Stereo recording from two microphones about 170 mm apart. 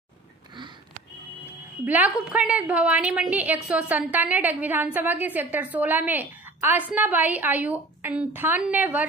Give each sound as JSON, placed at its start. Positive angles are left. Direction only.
{"t": 1.9, "sound": "a woman's voice", "side_deg": -10}